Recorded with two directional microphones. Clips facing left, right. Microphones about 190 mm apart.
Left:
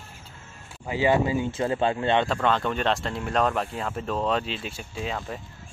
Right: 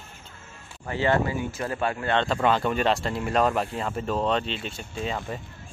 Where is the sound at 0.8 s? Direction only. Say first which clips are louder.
Left 2 dB; 10° left (ahead or behind).